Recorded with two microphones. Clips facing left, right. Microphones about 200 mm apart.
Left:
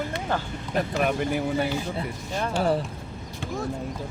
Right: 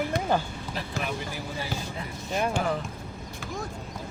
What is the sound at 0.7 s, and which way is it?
Speech, 50° left (ahead or behind).